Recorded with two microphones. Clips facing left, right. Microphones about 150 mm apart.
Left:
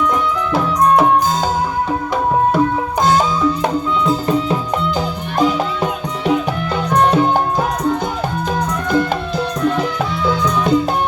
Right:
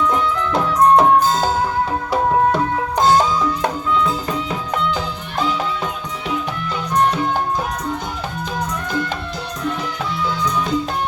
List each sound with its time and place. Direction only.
4.9 s music: 45° left (ahead or behind)
6.9 s music: 70° left (ahead or behind)
10.2 s music: 60° left (ahead or behind)